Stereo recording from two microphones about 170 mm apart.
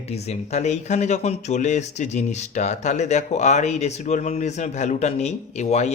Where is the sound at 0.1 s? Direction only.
40° left (ahead or behind).